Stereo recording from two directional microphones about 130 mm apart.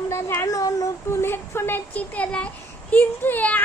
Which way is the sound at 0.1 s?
20° left (ahead or behind).